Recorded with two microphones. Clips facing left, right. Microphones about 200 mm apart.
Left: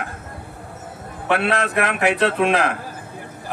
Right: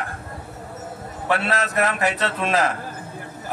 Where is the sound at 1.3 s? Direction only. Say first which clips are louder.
Left 3 dB; 60° left (ahead or behind).